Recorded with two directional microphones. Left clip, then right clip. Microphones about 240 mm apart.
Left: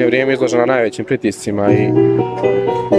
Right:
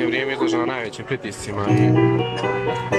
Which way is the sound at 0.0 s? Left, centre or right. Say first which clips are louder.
Left 8 dB; left.